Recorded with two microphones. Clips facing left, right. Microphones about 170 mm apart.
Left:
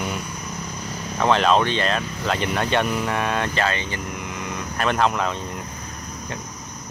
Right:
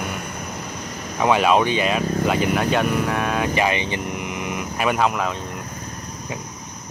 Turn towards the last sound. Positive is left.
turn(degrees=-5)  # may be behind; listen again after turning